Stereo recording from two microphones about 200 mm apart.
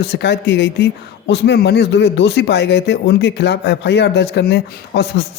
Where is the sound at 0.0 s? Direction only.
60° left (ahead or behind).